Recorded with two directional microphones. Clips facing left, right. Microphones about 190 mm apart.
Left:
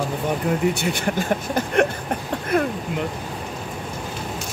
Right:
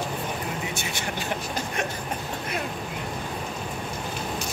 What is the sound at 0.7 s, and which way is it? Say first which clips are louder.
Speech: left 8 dB; 60° left (ahead or behind).